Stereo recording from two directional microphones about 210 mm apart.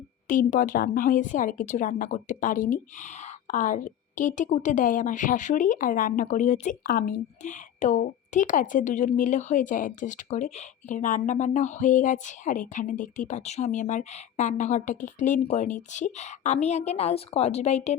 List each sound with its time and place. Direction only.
0.3 s a woman's voice: 40° left (ahead or behind)